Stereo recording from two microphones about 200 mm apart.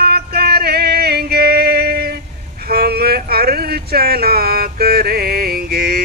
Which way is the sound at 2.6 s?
50° right (ahead or behind).